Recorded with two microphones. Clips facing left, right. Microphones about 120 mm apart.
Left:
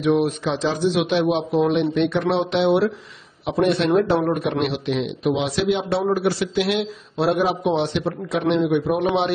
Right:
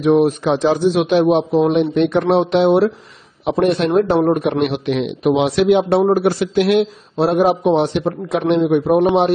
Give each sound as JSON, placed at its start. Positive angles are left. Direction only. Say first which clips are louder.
{"t": 0.0, "sound": "a man's voice", "louder": "right 6 dB", "side_deg": -40}
{"t": 8.6, "sound": "a man's voice", "louder": "right 6 dB", "side_deg": -35}